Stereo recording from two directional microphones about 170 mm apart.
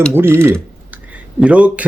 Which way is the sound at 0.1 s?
15° right (ahead or behind).